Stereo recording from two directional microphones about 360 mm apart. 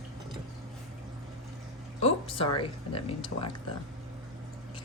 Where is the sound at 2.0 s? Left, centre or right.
Centre.